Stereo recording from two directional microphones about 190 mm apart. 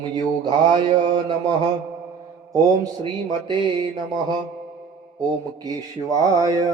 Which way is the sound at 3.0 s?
25° right (ahead or behind).